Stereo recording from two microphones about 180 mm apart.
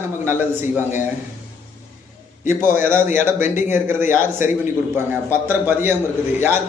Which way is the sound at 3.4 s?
45° left (ahead or behind).